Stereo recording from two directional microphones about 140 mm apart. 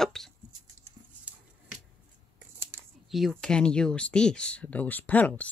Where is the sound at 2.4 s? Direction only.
15° right (ahead or behind).